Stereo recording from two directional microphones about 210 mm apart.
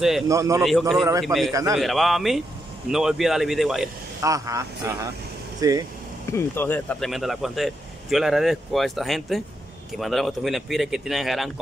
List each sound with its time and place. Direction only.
0.3 s speech: 15° right (ahead or behind)
0.6 s speech: centre (ahead or behind)
4.2 s speech: 15° right (ahead or behind)
6.3 s speech: 10° left (ahead or behind)